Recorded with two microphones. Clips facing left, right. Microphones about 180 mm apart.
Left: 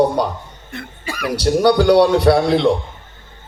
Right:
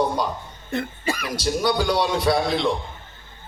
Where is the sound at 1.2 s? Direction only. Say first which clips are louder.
Left 11 dB; 65° left (ahead or behind).